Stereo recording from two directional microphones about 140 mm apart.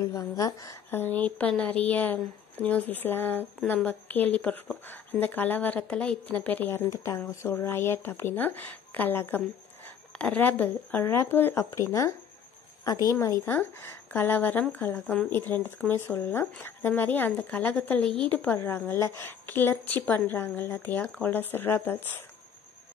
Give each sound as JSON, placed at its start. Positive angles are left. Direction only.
{"t": 0.0, "sound": "a woman's voice", "side_deg": 25}
{"t": 0.8, "sound": "a woman's voice", "side_deg": 15}